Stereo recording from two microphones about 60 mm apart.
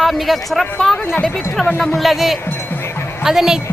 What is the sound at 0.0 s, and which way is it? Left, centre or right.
Speech, centre.